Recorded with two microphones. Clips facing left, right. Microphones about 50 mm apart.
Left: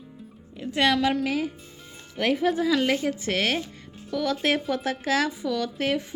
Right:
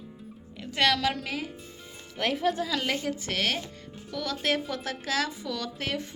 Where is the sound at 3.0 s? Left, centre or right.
Left.